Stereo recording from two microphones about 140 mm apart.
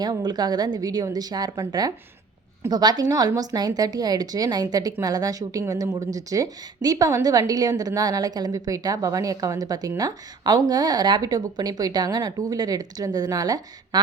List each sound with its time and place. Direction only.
0.0 s a woman's voice: 30° right (ahead or behind)